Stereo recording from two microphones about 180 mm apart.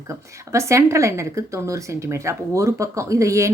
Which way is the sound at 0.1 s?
15° right (ahead or behind).